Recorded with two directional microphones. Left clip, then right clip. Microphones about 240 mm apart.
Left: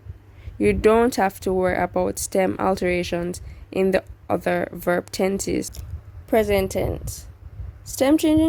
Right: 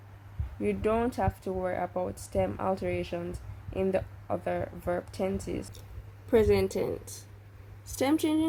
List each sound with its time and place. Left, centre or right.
0.6 s a woman's voice: left